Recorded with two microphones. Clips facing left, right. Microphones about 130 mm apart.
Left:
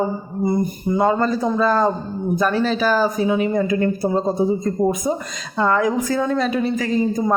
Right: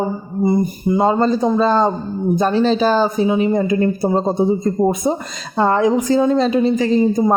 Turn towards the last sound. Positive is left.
turn(degrees=-25)  # may be behind; listen again after turning